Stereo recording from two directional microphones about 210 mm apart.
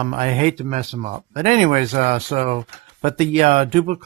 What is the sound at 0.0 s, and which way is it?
Speech, 30° right (ahead or behind).